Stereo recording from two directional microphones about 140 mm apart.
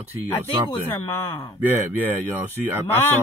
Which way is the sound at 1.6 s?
15° right (ahead or behind).